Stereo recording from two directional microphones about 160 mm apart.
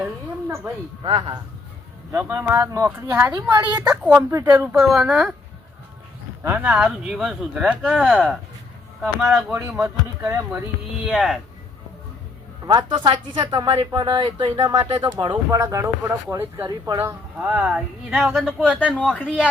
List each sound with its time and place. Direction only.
0.0 s a sound: 15° right (ahead or behind)
1.0 s speech: 25° right (ahead or behind)
2.1 s speech: 15° right (ahead or behind)
4.2 s speech: 20° right (ahead or behind)
4.7 s speech: centre (ahead or behind)
6.4 s speech: 10° right (ahead or behind)
11.0 s speech: centre (ahead or behind)
12.6 s speech: 30° right (ahead or behind)
17.4 s speech: 5° right (ahead or behind)
18.7 s speech: 10° right (ahead or behind)
18.9 s a man's voice: 10° left (ahead or behind)